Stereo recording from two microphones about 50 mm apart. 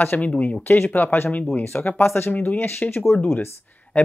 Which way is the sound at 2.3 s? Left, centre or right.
Left.